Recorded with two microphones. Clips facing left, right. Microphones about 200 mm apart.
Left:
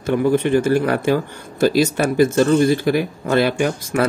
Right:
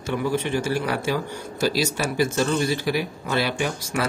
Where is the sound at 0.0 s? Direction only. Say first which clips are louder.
Left 8 dB; 55° left (ahead or behind).